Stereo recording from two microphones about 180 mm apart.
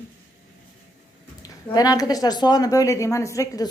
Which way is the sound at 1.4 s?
20° left (ahead or behind).